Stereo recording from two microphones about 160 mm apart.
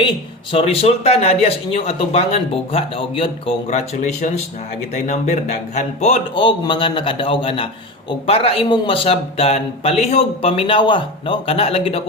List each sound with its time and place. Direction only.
0.5 s speech: 40° left (ahead or behind)